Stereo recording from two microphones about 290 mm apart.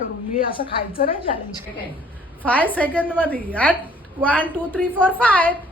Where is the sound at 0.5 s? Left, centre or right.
Centre.